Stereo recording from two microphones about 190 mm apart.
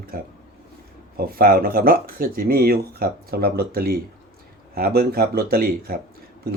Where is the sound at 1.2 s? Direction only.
50° right (ahead or behind).